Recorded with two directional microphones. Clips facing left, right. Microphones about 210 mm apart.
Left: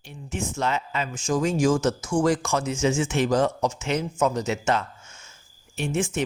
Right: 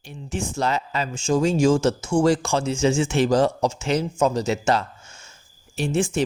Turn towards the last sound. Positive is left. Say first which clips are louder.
# right 3 dB
turn(degrees=-30)  # may be behind; listen again after turning